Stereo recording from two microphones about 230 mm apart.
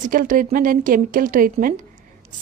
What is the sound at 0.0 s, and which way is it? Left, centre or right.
A woman's voice, right.